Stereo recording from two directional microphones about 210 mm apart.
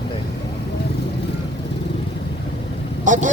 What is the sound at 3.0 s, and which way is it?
Vehicle, 35° right (ahead or behind).